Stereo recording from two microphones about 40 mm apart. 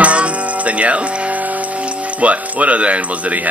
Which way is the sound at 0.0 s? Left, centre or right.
Right.